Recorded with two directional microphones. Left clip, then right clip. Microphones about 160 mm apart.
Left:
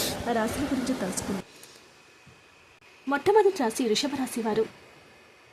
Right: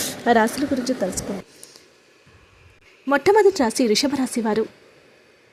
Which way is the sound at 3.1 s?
35° right (ahead or behind).